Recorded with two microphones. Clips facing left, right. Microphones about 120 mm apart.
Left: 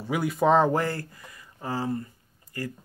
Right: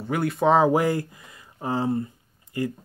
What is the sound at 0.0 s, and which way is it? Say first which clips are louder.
Speech: right 2 dB; centre (ahead or behind).